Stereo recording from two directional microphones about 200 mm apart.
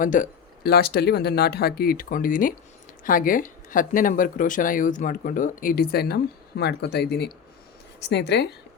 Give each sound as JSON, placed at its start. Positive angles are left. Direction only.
{"t": 0.0, "sound": "speech", "side_deg": 40}